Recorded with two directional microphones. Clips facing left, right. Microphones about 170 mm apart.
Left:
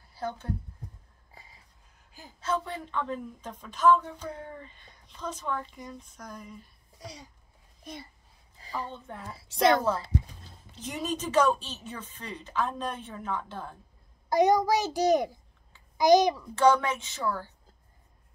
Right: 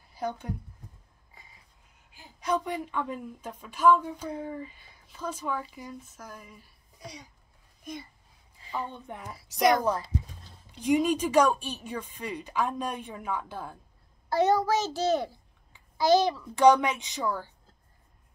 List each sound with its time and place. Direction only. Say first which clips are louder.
0.1 s speech: right 1 dB; 15° right (ahead or behind)
1.4 s a sound: left 3 dB; 35° left (ahead or behind)
2.4 s speech: right 2 dB; 15° right (ahead or behind)
8.5 s a sound: right 1 dB; 40° left (ahead or behind)
8.9 s speech: even; 15° right (ahead or behind)
9.3 s a woman's voice: even; 25° left (ahead or behind)
10.8 s speech: right 9 dB; 10° right (ahead or behind)
14.3 s a child's voice: left 1 dB; 15° left (ahead or behind)
16.5 s speech: right 3 dB; 15° right (ahead or behind)